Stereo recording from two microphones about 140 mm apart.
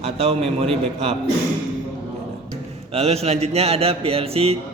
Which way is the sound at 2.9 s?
50° right (ahead or behind).